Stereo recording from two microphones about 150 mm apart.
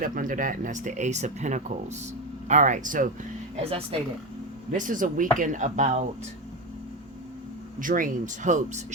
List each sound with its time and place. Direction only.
0.0 s speech: 65° right (ahead or behind)
3.5 s speech: 40° right (ahead or behind)
4.7 s speech: 60° right (ahead or behind)
7.8 s speech: 65° right (ahead or behind)